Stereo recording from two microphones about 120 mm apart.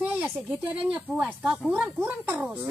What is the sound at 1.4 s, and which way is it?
Speech, centre (ahead or behind).